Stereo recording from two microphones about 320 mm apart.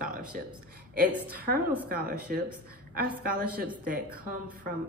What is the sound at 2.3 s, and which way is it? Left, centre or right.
A woman's voice, right.